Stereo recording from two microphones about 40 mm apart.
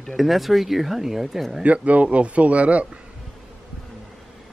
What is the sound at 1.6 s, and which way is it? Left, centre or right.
A man's voice, right.